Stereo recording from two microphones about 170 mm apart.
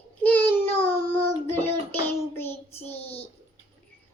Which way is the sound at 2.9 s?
35° left (ahead or behind).